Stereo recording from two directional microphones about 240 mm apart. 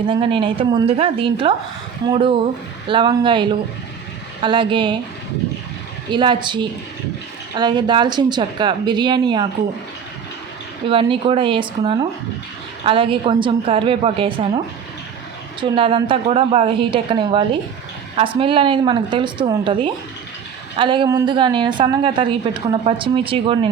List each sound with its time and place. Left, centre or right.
0.1 s a woman's voice: right
6.1 s a woman's voice: centre
10.8 s a woman's voice: right
15.6 s a woman's voice: right